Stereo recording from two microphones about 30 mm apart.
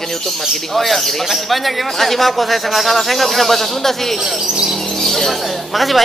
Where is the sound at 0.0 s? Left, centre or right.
Centre.